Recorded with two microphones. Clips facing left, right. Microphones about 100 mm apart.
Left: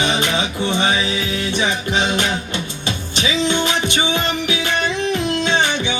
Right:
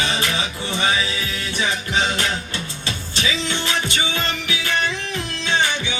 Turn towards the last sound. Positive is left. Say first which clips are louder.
# left 3 dB
turn(degrees=20)  # may be behind; listen again after turning